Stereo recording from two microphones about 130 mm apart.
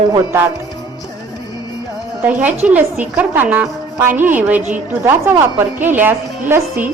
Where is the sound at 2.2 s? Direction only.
10° right (ahead or behind).